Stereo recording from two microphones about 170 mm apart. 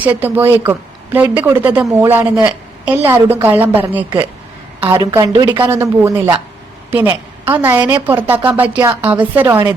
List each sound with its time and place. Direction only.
0.0 s speech: 10° right (ahead or behind)
5.2 s a woman's voice: 25° right (ahead or behind)